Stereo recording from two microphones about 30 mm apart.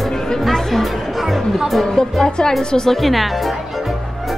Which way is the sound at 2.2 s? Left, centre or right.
Left.